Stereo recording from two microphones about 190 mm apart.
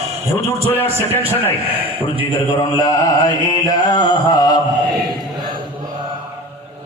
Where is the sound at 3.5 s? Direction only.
20° left (ahead or behind).